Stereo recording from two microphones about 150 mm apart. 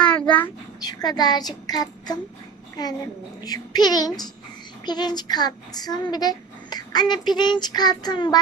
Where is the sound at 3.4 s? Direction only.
25° left (ahead or behind).